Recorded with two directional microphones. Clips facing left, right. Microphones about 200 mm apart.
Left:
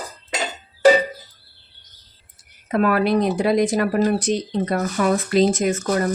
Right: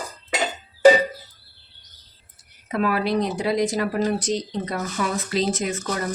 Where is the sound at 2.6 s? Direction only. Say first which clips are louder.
Left 4 dB; 50° left (ahead or behind).